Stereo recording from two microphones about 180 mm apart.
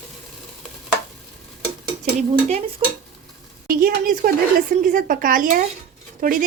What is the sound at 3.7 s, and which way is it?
Speech, 50° right (ahead or behind).